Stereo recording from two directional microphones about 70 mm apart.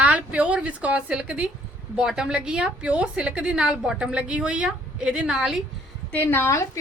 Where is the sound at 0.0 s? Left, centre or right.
Centre.